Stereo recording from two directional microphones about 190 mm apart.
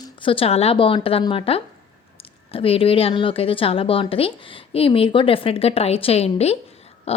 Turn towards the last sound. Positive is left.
turn(degrees=30)  # may be behind; listen again after turning